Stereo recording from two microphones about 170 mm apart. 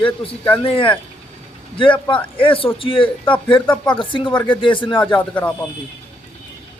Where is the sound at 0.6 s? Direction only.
30° left (ahead or behind).